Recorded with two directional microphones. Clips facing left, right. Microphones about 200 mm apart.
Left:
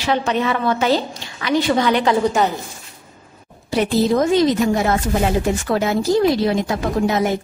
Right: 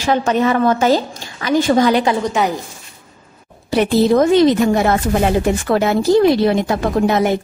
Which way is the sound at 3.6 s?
60° right (ahead or behind).